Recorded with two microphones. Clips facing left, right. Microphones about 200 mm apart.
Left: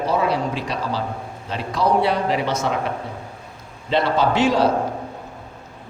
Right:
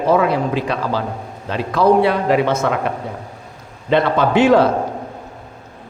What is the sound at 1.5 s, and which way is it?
A man's voice, 55° right (ahead or behind).